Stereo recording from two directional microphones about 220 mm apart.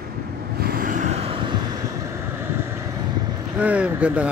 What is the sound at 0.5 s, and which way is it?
Vehicle, 45° right (ahead or behind).